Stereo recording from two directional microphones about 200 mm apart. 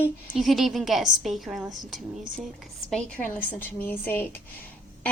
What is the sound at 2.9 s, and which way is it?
A woman's voice, 5° left (ahead or behind).